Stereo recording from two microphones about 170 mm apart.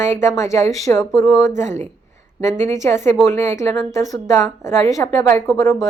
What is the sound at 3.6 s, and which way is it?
A woman's voice, 15° left (ahead or behind).